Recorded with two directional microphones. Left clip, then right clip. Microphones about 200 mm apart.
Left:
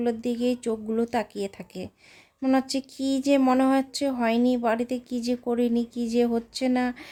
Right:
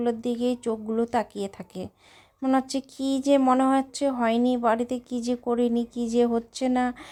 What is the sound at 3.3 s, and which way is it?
A woman's voice, 10° left (ahead or behind).